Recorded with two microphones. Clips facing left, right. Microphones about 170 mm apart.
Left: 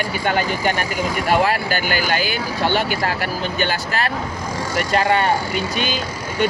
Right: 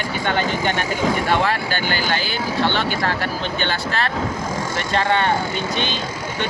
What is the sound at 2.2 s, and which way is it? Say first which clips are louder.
Speech: even; 10° left (ahead or behind).